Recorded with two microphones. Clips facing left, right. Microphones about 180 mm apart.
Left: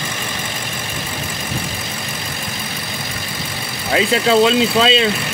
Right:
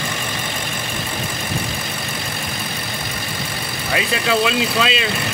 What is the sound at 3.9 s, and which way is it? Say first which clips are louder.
Speech: left 6 dB; 30° left (ahead or behind).